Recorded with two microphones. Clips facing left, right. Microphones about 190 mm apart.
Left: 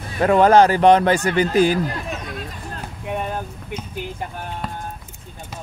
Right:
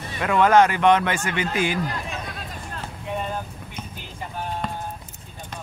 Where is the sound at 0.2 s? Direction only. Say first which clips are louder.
Left 4 dB; 35° left (ahead or behind).